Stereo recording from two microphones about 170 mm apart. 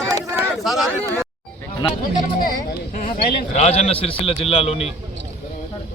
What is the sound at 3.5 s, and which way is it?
A man's voice, 40° left (ahead or behind).